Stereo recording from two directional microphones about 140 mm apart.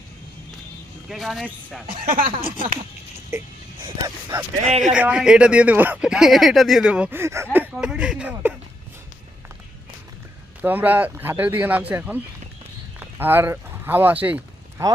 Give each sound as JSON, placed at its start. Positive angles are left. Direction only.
{"t": 1.1, "sound": "speech", "side_deg": 0}
{"t": 1.9, "sound": "speech", "side_deg": -90}
{"t": 3.3, "sound": "speech", "side_deg": -20}
{"t": 4.6, "sound": "speech", "side_deg": -55}
{"t": 4.9, "sound": "speech", "side_deg": -10}
{"t": 10.6, "sound": "speech", "side_deg": -10}